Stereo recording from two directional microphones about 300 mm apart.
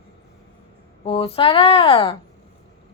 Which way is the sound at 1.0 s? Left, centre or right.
Centre.